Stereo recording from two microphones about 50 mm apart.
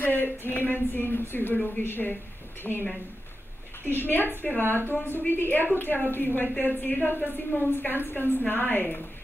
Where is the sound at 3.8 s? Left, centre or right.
Left.